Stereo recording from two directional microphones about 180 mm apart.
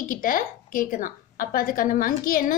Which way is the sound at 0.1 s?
50° left (ahead or behind).